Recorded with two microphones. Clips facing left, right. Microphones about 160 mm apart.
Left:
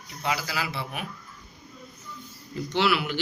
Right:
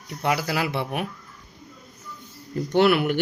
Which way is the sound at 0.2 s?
55° right (ahead or behind).